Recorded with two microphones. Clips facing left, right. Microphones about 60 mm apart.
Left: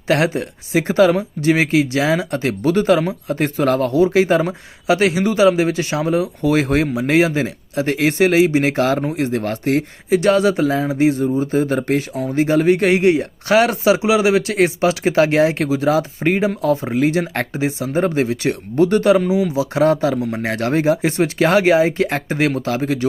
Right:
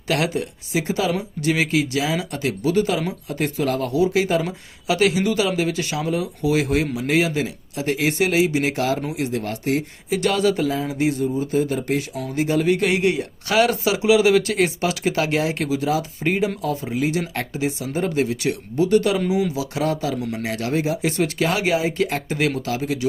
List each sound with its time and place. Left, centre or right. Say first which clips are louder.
0.1 s speech: left 5 dB; left
1.1 s speech: left 5 dB; left
6.4 s speech: left 2 dB; left
19.3 s speech: left 4 dB; left
19.7 s speech: left 11 dB; left